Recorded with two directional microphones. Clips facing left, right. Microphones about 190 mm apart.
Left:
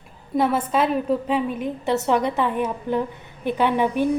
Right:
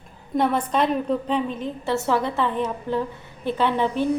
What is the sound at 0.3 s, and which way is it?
A woman's voice, 5° left (ahead or behind).